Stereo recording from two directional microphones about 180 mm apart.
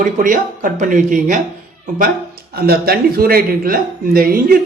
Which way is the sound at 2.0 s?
60° right (ahead or behind).